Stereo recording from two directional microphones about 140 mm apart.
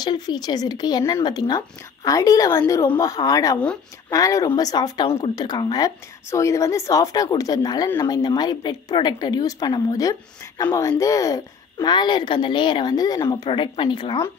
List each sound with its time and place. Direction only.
0.0 s a woman's voice: 30° left (ahead or behind)